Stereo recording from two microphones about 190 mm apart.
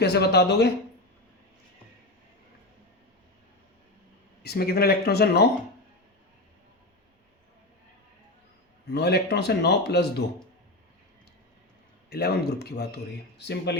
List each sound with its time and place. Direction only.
0.0 s a man's voice: 60° left (ahead or behind)
4.4 s a man's voice: 55° left (ahead or behind)
8.9 s a man's voice: 60° left (ahead or behind)
12.1 s a man's voice: 60° left (ahead or behind)